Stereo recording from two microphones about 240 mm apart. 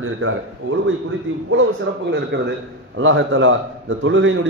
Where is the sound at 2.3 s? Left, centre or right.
Right.